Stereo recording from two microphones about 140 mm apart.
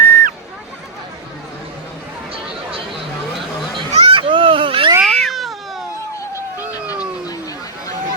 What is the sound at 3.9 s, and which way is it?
Vehicle, 40° right (ahead or behind).